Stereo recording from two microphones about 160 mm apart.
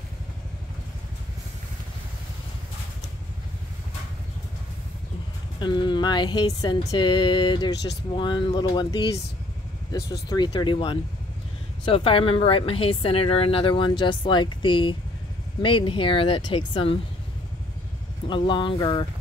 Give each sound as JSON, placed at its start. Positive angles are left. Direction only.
{"t": 5.6, "sound": "speech", "side_deg": 30}
{"t": 10.3, "sound": "speech", "side_deg": 25}
{"t": 18.3, "sound": "speech", "side_deg": 30}